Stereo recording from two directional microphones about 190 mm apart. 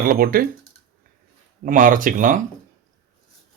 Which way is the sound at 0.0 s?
50° right (ahead or behind).